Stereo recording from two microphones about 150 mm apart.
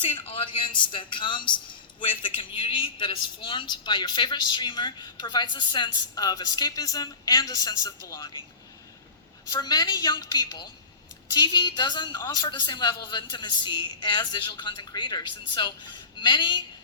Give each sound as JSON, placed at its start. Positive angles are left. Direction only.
{"t": 0.0, "sound": "a woman's voice", "side_deg": 35}
{"t": 9.5, "sound": "a woman's voice", "side_deg": 30}